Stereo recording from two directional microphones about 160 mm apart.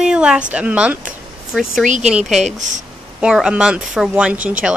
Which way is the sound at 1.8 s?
50° right (ahead or behind).